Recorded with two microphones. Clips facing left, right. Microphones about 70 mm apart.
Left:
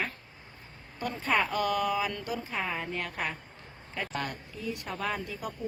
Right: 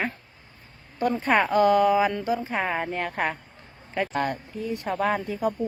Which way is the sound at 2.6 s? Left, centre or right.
Right.